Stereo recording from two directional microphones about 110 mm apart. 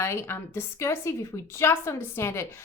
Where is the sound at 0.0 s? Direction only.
25° left (ahead or behind).